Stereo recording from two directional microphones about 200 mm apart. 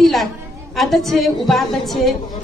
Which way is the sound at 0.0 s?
Centre (ahead or behind).